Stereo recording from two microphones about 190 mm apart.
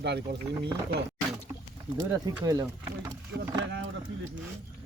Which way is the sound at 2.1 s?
15° right (ahead or behind).